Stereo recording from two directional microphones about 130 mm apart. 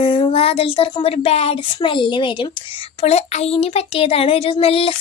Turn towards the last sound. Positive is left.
turn(degrees=50)  # may be behind; listen again after turning